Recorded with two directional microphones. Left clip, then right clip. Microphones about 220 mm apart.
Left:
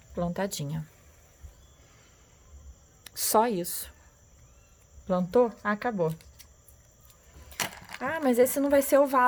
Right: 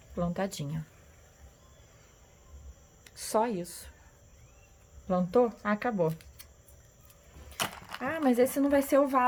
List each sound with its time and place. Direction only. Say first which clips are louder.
0.1 s speech: left 2 dB; 35° left (ahead or behind)
3.0 s speech: left 5 dB; 50° left (ahead or behind)
5.0 s speech: left 2 dB; 40° left (ahead or behind)
7.8 s speech: left 4 dB; 35° left (ahead or behind)